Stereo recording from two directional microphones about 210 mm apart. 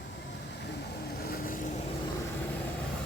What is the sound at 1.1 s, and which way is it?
Vehicle, 45° left (ahead or behind).